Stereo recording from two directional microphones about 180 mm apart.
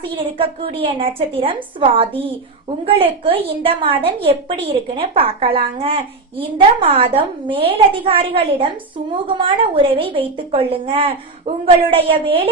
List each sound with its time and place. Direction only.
0.0 s a woman's voice: 30° right (ahead or behind)